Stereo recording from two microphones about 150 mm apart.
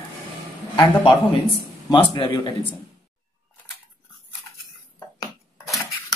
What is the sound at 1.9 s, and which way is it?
Speech, 35° left (ahead or behind).